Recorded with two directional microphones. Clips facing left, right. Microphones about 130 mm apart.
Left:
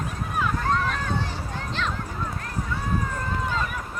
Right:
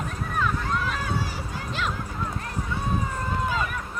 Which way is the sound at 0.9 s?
5° right (ahead or behind).